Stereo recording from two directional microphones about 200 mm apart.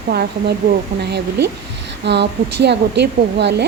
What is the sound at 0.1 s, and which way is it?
A woman's voice, 55° right (ahead or behind).